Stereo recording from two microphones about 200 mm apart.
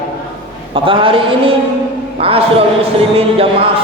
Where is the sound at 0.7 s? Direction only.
25° right (ahead or behind).